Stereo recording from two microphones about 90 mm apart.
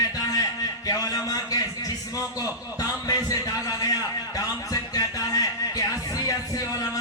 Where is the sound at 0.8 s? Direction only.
45° left (ahead or behind).